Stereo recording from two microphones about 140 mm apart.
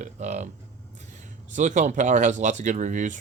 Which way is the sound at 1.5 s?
60° right (ahead or behind).